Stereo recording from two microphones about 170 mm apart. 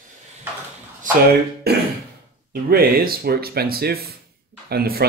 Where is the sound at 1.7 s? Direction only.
70° right (ahead or behind).